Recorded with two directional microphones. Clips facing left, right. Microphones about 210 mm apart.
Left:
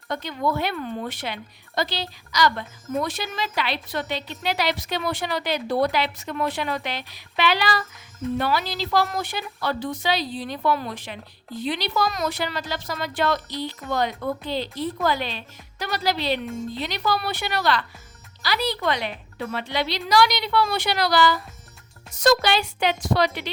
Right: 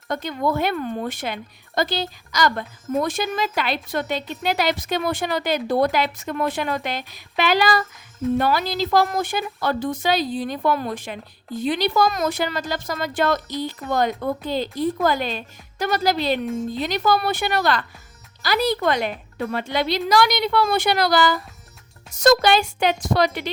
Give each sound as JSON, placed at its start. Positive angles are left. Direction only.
{"t": 0.1, "sound": "speech", "side_deg": -50}